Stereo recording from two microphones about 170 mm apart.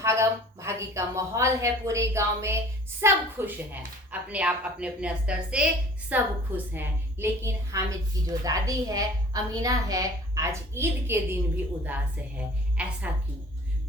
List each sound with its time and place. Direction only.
0.0 s a woman's voice: 15° right (ahead or behind)